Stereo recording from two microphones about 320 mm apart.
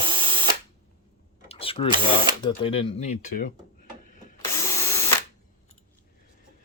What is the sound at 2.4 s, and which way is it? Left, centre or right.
Speech, centre.